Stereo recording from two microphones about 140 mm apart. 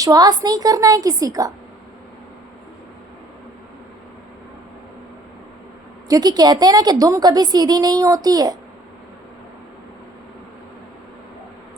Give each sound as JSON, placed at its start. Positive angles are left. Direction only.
{"t": 0.0, "sound": "a woman's voice", "side_deg": -30}
{"t": 6.1, "sound": "a woman's voice", "side_deg": -30}